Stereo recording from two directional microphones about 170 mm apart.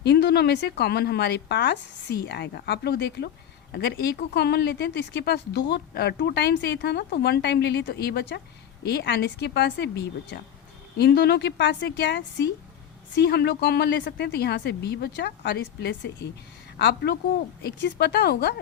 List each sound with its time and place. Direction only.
0.0 s a woman's voice: 75° left (ahead or behind)
17.6 s a woman's voice: 70° left (ahead or behind)